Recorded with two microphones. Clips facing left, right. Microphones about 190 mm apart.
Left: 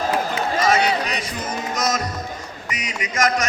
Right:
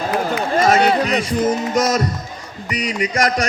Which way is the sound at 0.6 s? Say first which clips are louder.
Right 5 dB; 45° right (ahead or behind).